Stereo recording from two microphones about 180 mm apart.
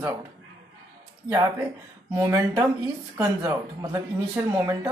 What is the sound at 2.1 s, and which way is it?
Speech, 20° right (ahead or behind).